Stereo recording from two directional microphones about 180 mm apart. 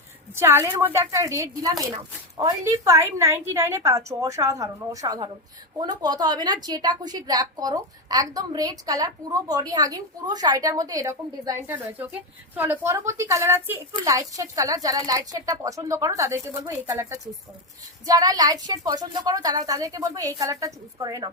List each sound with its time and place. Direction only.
0.3 s a woman's voice: 15° right (ahead or behind)